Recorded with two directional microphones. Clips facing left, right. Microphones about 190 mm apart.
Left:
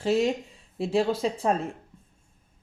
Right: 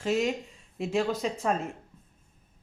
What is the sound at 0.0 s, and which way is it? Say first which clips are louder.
Speech: left 3 dB; 35° left (ahead or behind).